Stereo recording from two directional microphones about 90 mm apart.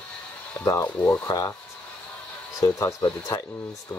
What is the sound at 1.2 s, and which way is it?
Speech, 45° left (ahead or behind).